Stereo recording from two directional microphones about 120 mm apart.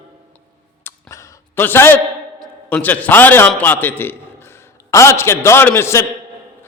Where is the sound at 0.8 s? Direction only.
20° left (ahead or behind).